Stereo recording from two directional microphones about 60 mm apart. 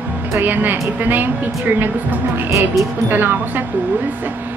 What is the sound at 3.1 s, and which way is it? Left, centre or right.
Speech, right.